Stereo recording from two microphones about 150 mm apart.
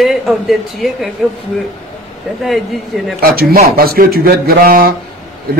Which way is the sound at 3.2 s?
85° right.